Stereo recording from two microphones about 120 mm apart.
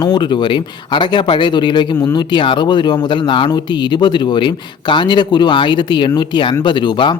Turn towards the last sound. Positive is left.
turn(degrees=40)  # may be behind; listen again after turning